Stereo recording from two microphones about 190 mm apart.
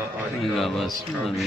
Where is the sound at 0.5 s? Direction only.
Centre (ahead or behind).